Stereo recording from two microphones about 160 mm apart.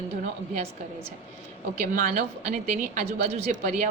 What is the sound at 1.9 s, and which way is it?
A woman's voice, 55° right (ahead or behind).